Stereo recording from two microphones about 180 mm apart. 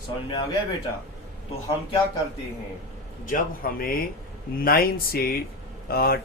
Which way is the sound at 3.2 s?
50° left (ahead or behind).